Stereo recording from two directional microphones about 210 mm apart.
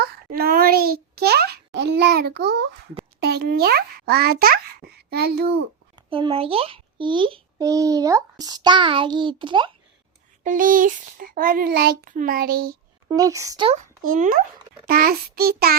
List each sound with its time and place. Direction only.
0.0 s a child's voice: 45° right (ahead or behind)
6.0 s a child's voice: 25° right (ahead or behind)
10.4 s a child's voice: 40° right (ahead or behind)
13.1 s speech: 15° right (ahead or behind)
14.0 s a child's voice: 40° right (ahead or behind)